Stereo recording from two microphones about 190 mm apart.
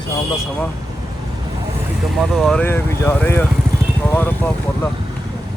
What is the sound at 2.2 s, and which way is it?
Speech, centre (ahead or behind).